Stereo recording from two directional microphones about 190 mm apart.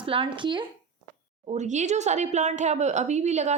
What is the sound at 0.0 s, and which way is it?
Speech, 30° right (ahead or behind).